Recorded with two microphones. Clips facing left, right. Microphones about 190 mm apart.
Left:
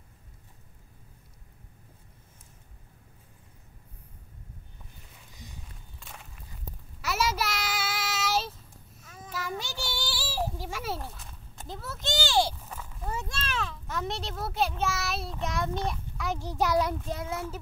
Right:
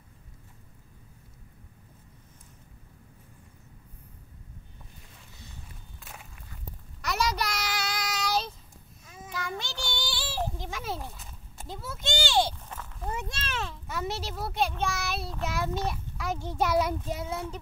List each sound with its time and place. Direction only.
5.9 s walk: 5° right (ahead or behind)
7.0 s child singing: 5° left (ahead or behind)
9.0 s a sound: 5° right (ahead or behind)
9.3 s child singing: 5° left (ahead or behind)
13.1 s a child's voice: 20° right (ahead or behind)
13.8 s a child's voice: 5° right (ahead or behind)